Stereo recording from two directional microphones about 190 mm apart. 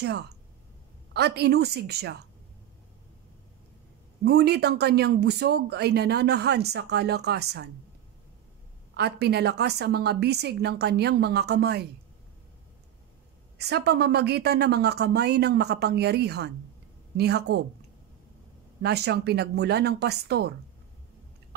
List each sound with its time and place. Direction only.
1.1 s speech: 60° right (ahead or behind)
4.2 s speech: 60° right (ahead or behind)
8.9 s speech: 60° right (ahead or behind)
13.6 s speech: 60° right (ahead or behind)
18.8 s speech: 60° right (ahead or behind)